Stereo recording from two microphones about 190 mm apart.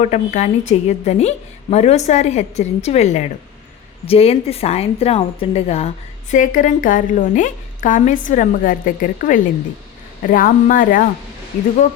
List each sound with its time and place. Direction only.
0.0 s a woman's voice: 40° left (ahead or behind)
6.3 s a woman's voice: 45° left (ahead or behind)